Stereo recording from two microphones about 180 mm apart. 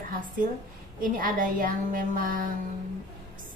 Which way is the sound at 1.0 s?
50° right (ahead or behind).